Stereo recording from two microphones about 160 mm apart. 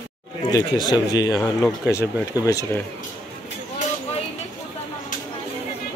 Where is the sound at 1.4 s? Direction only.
Centre (ahead or behind).